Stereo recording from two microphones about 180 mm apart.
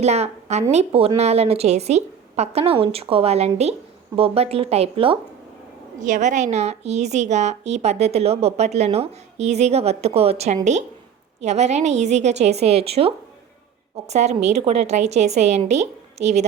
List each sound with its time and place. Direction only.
0.0 s a woman's voice: 35° right (ahead or behind)